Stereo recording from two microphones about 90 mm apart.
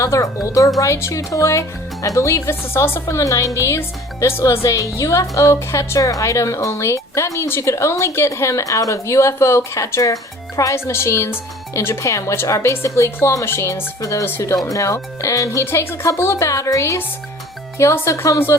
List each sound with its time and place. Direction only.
0.0 s speech: 35° left (ahead or behind)
14.3 s speech: 25° left (ahead or behind)
14.5 s speech: 40° left (ahead or behind)
15.6 s speech: 25° left (ahead or behind)